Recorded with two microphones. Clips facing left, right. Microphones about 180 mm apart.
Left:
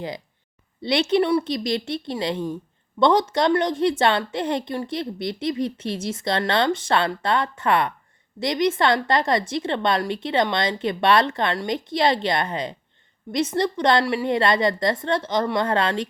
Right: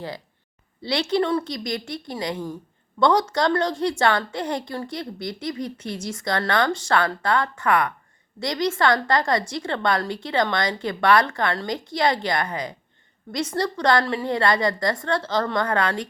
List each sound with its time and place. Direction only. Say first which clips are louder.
0.8 s a woman's voice: left 3 dB; 20° left (ahead or behind)